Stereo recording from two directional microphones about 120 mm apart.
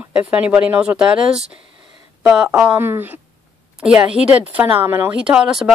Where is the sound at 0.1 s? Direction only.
10° right (ahead or behind).